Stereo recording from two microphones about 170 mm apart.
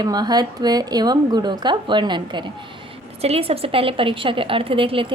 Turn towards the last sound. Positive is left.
turn(degrees=-30)  # may be behind; listen again after turning